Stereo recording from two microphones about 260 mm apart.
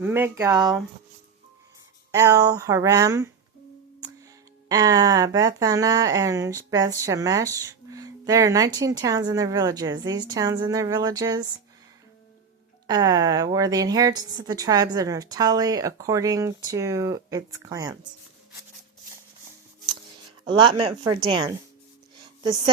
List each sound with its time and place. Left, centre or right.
0.0 s speech: centre
2.1 s speech: centre
4.7 s speech: centre
12.9 s speech: centre
20.5 s speech: centre